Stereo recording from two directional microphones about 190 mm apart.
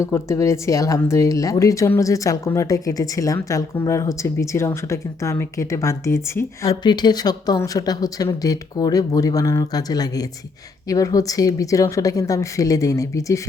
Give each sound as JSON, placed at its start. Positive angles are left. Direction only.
{"t": 0.0, "sound": "speech", "side_deg": 15}